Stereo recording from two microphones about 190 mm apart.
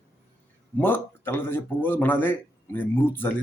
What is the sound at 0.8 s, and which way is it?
Speech, 10° left (ahead or behind).